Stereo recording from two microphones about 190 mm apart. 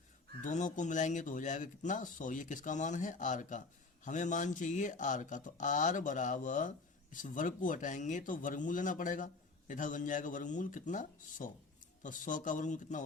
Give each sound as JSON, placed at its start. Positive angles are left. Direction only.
{"t": 0.4, "sound": "speech", "side_deg": 40}